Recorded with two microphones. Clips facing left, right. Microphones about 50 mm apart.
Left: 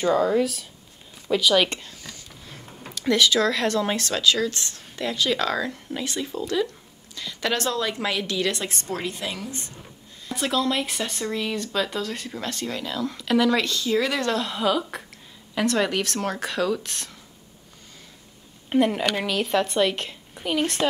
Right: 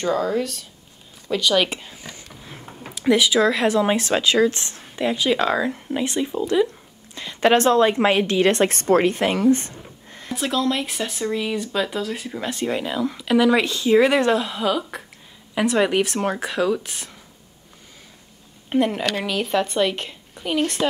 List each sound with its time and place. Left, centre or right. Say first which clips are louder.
0.0 s a woman's voice: left 1 dB; centre
1.8 s a woman's voice: right 3 dB; centre; by 9.8 s right
10.3 s speech: right 2 dB; centre; by 13.0 s right
13.0 s speech: right 3 dB; centre
14.3 s a woman's voice: right 2 dB; centre
15.5 s speech: right 4 dB; centre
18.7 s a woman's voice: right 1 dB; centre